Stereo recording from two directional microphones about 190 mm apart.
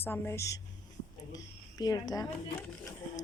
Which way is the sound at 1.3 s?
20° left (ahead or behind).